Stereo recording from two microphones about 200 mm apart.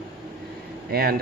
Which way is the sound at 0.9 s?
50° right (ahead or behind).